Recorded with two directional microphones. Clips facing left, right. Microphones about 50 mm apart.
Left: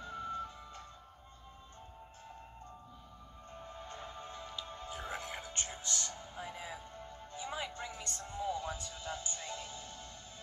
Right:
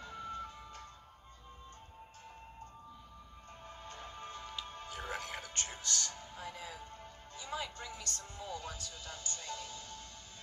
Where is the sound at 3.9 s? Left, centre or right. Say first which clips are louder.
Right 2 dB; left.